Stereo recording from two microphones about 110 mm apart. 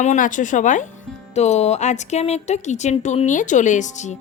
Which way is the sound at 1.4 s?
90° left.